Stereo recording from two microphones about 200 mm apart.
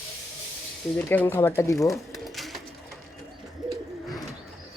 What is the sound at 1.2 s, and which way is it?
Speech, 10° left (ahead or behind).